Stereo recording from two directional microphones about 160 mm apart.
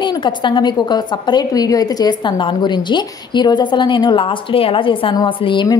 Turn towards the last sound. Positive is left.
turn(degrees=30)  # may be behind; listen again after turning